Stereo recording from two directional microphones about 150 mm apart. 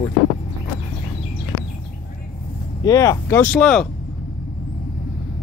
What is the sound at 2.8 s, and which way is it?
Speech, 25° left (ahead or behind).